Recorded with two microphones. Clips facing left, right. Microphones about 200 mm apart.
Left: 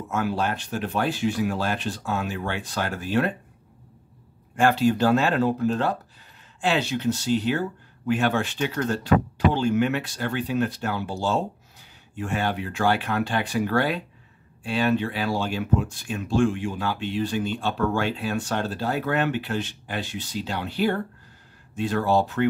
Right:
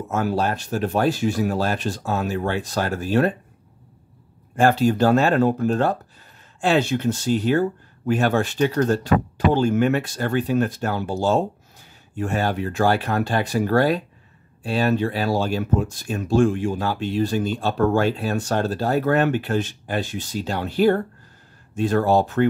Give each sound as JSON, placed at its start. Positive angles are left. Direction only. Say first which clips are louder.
{"t": 0.1, "sound": "speech", "louder": "right 3 dB", "side_deg": -40}
{"t": 4.6, "sound": "speech", "louder": "right 3 dB", "side_deg": -40}